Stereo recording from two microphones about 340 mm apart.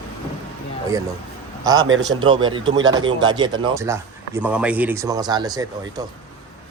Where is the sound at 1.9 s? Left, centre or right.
Right.